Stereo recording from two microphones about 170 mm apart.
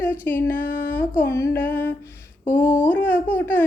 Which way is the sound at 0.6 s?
55° left (ahead or behind).